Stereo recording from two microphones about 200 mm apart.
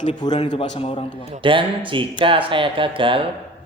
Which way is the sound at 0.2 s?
20° left (ahead or behind).